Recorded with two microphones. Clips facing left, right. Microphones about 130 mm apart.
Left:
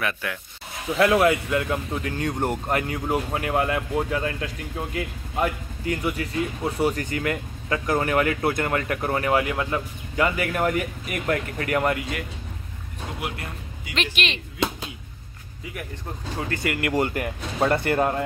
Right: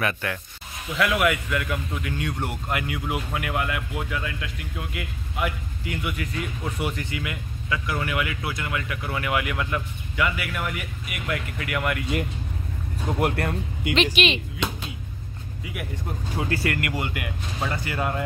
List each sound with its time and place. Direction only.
0.0 s speech: centre (ahead or behind)
0.9 s speech: 35° left (ahead or behind)
13.2 s speech: 60° right (ahead or behind)
14.1 s speech: 5° right (ahead or behind)
16.9 s speech: 40° left (ahead or behind)
17.6 s speech: 55° left (ahead or behind)